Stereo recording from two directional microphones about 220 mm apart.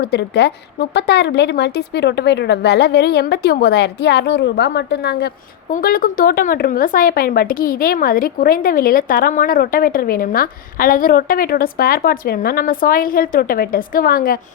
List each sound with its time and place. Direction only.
0.0 s speech: 50° left (ahead or behind)